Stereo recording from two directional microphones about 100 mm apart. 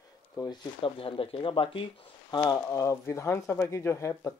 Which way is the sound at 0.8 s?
65° left (ahead or behind).